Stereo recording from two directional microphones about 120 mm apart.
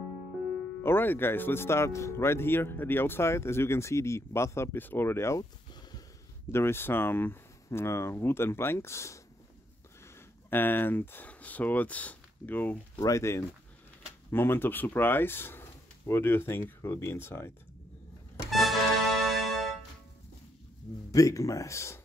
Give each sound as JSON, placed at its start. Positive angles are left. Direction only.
{"t": 0.8, "sound": "speech", "side_deg": 15}
{"t": 5.7, "sound": "a sound", "side_deg": 35}
{"t": 6.5, "sound": "speech", "side_deg": 20}
{"t": 13.0, "sound": "speech", "side_deg": 25}
{"t": 18.5, "sound": "music", "side_deg": 0}
{"t": 21.1, "sound": "speech", "side_deg": 30}